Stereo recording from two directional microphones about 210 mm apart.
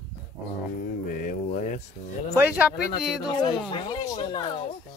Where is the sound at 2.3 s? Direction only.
10° right (ahead or behind).